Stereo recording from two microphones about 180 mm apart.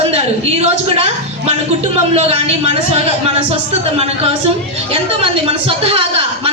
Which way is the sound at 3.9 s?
35° right (ahead or behind).